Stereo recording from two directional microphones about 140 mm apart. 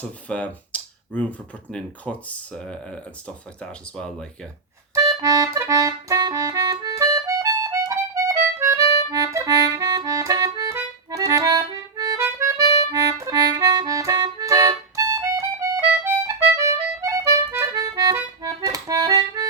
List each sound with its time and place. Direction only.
0.0 s speech: 10° left (ahead or behind)
4.9 s accordion: 25° right (ahead or behind)
12.8 s music: 25° right (ahead or behind)